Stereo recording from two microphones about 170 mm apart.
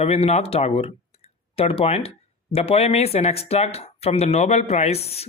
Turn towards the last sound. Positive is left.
turn(degrees=35)  # may be behind; listen again after turning